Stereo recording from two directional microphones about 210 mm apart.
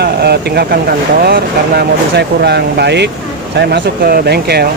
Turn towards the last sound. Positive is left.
turn(degrees=-50)  # may be behind; listen again after turning